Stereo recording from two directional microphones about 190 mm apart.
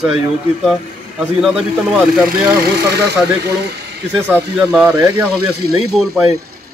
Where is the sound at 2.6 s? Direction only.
60° right (ahead or behind).